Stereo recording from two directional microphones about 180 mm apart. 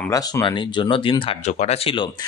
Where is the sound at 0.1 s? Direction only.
25° left (ahead or behind).